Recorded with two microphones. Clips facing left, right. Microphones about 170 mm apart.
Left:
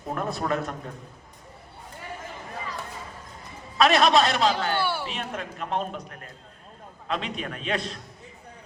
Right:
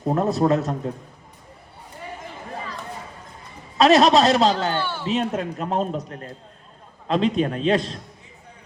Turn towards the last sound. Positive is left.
turn(degrees=-30)  # may be behind; listen again after turning